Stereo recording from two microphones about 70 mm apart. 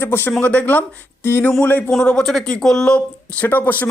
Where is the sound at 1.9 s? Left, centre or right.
Centre.